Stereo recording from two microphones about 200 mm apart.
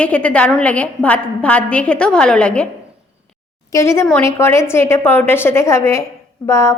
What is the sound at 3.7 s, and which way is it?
A woman's voice, 15° left (ahead or behind).